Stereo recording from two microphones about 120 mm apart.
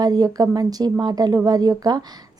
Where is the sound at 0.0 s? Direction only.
35° right (ahead or behind).